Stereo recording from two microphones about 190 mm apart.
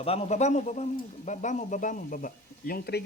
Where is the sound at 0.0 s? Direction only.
30° left (ahead or behind).